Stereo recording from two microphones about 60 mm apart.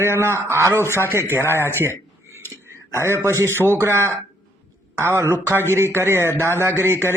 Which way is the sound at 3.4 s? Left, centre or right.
Left.